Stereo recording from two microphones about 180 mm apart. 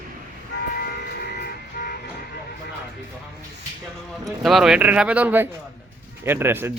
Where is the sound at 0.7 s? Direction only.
55° left (ahead or behind).